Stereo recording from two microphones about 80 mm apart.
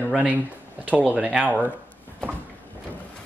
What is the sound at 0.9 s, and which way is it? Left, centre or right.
Speech, centre.